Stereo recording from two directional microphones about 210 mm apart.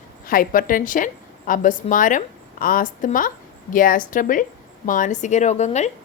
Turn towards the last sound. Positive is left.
turn(degrees=35)  # may be behind; listen again after turning